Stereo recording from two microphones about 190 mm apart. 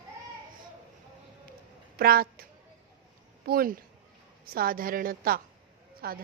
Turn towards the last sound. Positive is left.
turn(degrees=-55)  # may be behind; listen again after turning